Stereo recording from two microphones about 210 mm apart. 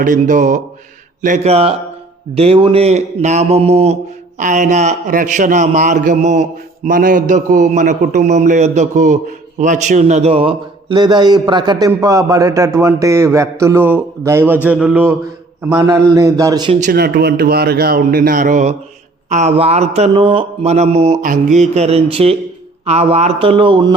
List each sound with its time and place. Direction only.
0.0 s a man's voice: 40° right (ahead or behind); by 16.7 s 20° right (ahead or behind)
16.8 s a man's voice: 45° right (ahead or behind); by 23.9 s 25° right (ahead or behind)